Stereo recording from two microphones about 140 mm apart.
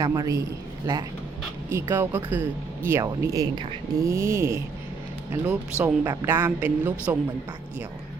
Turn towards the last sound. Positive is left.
turn(degrees=-10)  # may be behind; listen again after turning